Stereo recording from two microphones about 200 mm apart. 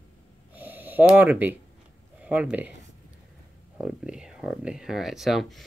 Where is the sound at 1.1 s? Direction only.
10° right (ahead or behind).